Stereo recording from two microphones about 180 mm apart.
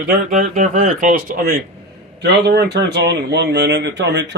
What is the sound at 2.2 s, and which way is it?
Speech, 70° right (ahead or behind).